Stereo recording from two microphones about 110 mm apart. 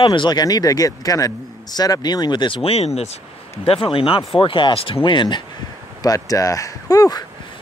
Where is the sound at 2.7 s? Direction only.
70° left (ahead or behind).